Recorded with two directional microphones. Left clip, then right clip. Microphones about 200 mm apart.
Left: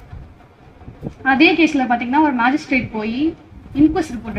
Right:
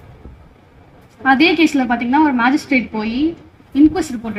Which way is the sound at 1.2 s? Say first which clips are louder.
Right 1 dB; 45° right (ahead or behind).